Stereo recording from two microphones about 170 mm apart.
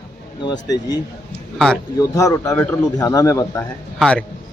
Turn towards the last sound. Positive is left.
turn(degrees=5)  # may be behind; listen again after turning